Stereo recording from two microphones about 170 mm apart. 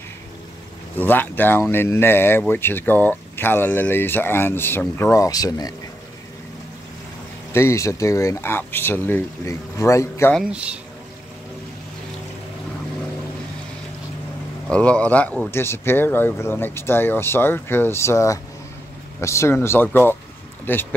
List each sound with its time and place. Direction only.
0.9 s speech: 10° left (ahead or behind)
7.5 s speech: 15° left (ahead or behind)
10.3 s speech: 5° right (ahead or behind)
14.7 s speech: 5° left (ahead or behind)